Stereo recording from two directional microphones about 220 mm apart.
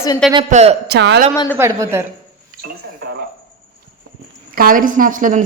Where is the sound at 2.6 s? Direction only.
50° right (ahead or behind).